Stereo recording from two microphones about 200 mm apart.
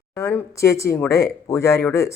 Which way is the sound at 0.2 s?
15° left (ahead or behind).